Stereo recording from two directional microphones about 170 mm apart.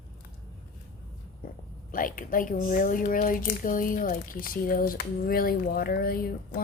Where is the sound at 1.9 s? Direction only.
55° left (ahead or behind).